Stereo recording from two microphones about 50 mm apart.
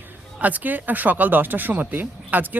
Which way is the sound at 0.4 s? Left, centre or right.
Right.